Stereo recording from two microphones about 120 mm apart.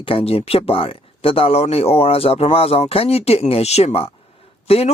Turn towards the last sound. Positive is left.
turn(degrees=55)  # may be behind; listen again after turning